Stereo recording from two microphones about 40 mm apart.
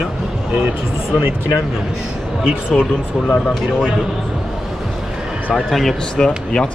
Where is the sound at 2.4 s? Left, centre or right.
Right.